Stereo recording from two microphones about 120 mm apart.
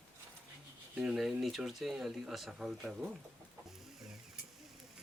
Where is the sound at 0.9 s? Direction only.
5° right (ahead or behind).